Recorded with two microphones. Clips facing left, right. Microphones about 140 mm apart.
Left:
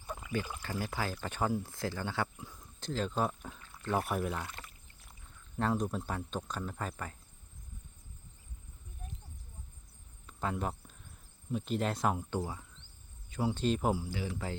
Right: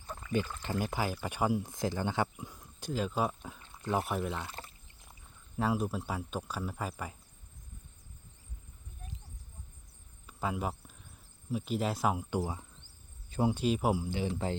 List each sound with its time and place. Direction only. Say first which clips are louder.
0.0 s pour: right 1 dB; 10° left (ahead or behind)
0.6 s speech: right 3 dB; 20° right (ahead or behind)
3.6 s pour: right 1 dB; 20° right (ahead or behind)
3.9 s speech: even; centre (ahead or behind)
4.4 s pour: right 2 dB; 30° right (ahead or behind)
5.5 s speech: right 1 dB; 5° right (ahead or behind)
10.2 s cricket: right 1 dB; 5° right (ahead or behind)
11.5 s speech: right 1 dB; 5° right (ahead or behind)
14.0 s speech: right 4 dB; 25° right (ahead or behind)